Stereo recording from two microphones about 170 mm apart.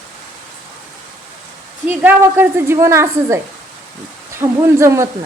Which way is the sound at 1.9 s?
10° right (ahead or behind).